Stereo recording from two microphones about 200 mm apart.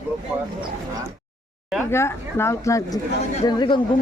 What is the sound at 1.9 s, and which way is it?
Speech, 10° left (ahead or behind).